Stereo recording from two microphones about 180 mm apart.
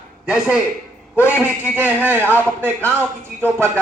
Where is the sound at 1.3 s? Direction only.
10° right (ahead or behind).